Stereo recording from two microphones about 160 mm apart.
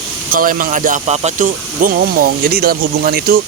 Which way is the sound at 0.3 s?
60° right (ahead or behind).